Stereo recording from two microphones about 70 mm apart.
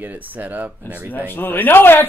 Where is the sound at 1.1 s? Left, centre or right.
Left.